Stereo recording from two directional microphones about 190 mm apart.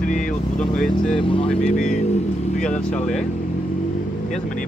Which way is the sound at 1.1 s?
25° left (ahead or behind).